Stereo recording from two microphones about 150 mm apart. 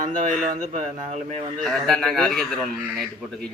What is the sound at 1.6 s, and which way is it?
A man's voice, centre (ahead or behind).